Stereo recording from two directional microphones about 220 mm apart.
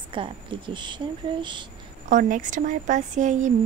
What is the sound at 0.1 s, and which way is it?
A woman's voice, 25° right (ahead or behind).